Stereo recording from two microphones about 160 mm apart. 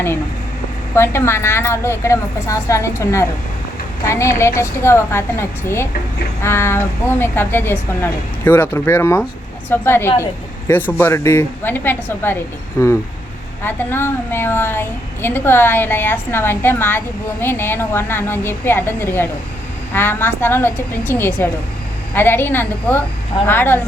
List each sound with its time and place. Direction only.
0.9 s a woman's voice: 15° left (ahead or behind)